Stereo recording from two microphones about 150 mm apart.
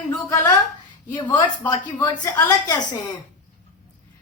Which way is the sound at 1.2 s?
30° left (ahead or behind).